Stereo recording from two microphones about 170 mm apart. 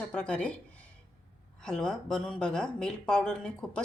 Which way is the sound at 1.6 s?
5° left (ahead or behind).